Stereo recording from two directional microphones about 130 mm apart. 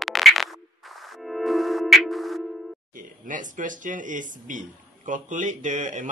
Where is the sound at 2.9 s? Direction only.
90° right.